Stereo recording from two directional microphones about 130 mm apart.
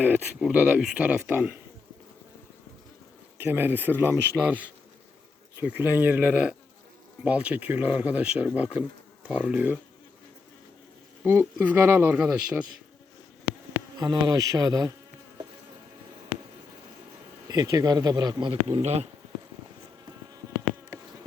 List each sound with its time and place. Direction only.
0.3 s speech: 5° right (ahead or behind)
3.3 s speech: 15° right (ahead or behind)
11.2 s speech: 20° right (ahead or behind)
14.0 s insect: 30° right (ahead or behind)
17.5 s speech: 30° right (ahead or behind)
18.8 s speech: 55° right (ahead or behind)